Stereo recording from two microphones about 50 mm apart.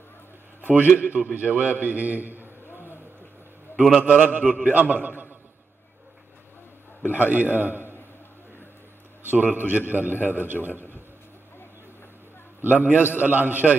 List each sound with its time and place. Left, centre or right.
0.6 s a man's voice: right
4.0 s a man's voice: right
7.1 s a man's voice: right
9.2 s a man's voice: right
12.6 s a man's voice: right